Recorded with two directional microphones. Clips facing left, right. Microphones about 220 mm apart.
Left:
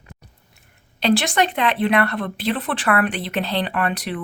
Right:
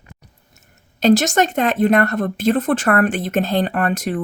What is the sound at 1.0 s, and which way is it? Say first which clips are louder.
Speech: right 4 dB; 45° right (ahead or behind).